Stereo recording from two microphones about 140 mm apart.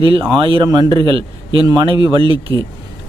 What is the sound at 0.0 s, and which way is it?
Speech, 40° right (ahead or behind).